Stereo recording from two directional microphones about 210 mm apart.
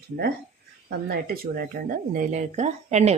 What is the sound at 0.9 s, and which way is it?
Speech, 45° right (ahead or behind).